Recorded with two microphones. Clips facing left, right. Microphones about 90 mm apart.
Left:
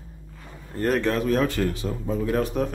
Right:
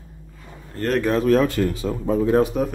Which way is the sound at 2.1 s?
65° right (ahead or behind).